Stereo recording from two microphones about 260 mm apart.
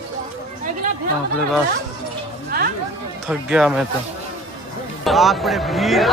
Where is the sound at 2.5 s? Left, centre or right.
Right.